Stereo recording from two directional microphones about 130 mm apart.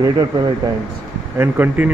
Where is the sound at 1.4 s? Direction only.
15° right (ahead or behind).